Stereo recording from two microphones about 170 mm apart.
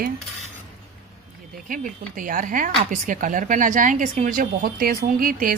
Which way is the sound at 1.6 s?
55° right (ahead or behind).